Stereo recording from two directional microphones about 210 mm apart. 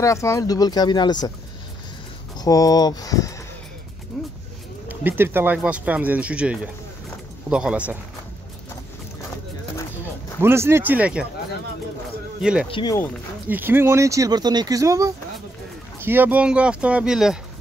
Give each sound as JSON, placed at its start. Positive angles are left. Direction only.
{"t": 0.0, "sound": "speech", "side_deg": 15}
{"t": 2.3, "sound": "speech", "side_deg": 15}
{"t": 4.8, "sound": "speech", "side_deg": -10}
{"t": 10.4, "sound": "speech", "side_deg": -10}
{"t": 12.4, "sound": "speech", "side_deg": -5}
{"t": 12.6, "sound": "speech", "side_deg": 25}
{"t": 13.5, "sound": "speech", "side_deg": -10}